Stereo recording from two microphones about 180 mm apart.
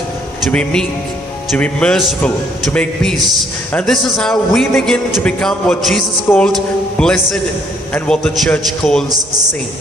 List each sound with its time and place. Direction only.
0.4 s a man's voice: 5° left (ahead or behind)
6.2 s music: 10° left (ahead or behind)
7.0 s a man's voice: 5° left (ahead or behind)